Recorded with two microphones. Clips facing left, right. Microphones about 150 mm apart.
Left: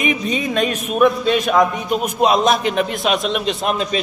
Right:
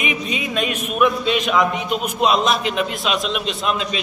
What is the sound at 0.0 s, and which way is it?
Speech, 15° right (ahead or behind).